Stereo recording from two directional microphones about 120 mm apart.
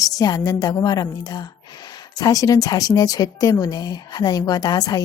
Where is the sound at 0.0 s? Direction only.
30° left (ahead or behind).